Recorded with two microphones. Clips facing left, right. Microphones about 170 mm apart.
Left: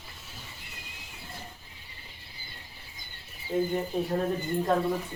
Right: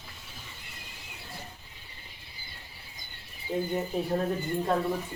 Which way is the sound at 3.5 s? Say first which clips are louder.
Left 3 dB; 10° right (ahead or behind).